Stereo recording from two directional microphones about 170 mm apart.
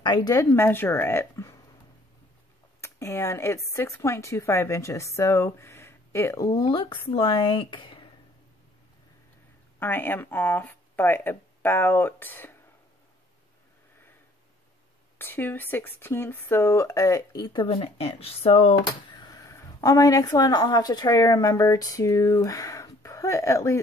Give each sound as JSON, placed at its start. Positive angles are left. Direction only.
{"t": 0.0, "sound": "speech", "side_deg": 25}
{"t": 2.8, "sound": "speech", "side_deg": 15}
{"t": 9.8, "sound": "speech", "side_deg": 10}
{"t": 15.1, "sound": "speech", "side_deg": 10}
{"t": 18.8, "sound": "speech", "side_deg": 20}